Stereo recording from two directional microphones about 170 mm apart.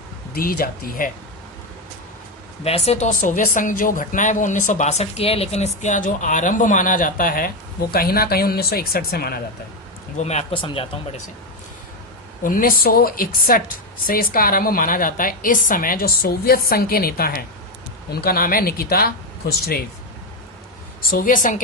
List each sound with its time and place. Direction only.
0.3 s a woman's voice: 60° left (ahead or behind)
2.6 s speech: 40° left (ahead or behind); by 9.4 s 65° left (ahead or behind)
10.2 s speech: 40° left (ahead or behind)
12.4 s a woman's voice: 55° left (ahead or behind)
21.1 s speech: 55° left (ahead or behind)